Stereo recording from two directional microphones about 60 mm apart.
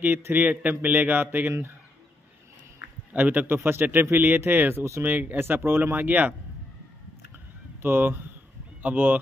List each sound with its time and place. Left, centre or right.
0.3 s a man's voice: right
3.1 s speech: right
3.4 s speech: right
7.8 s speech: right